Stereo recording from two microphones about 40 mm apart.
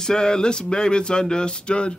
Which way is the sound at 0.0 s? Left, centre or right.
Centre.